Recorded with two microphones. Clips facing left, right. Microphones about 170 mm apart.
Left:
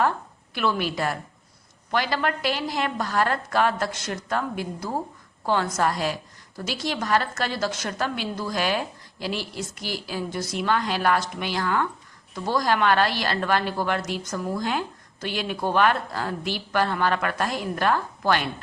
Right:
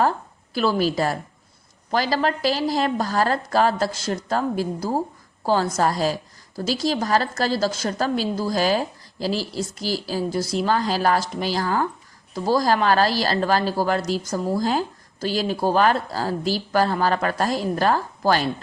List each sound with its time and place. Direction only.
0.5 s a woman's voice: 35° right (ahead or behind)